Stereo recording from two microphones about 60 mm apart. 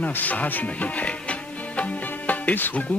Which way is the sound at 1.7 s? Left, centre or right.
Left.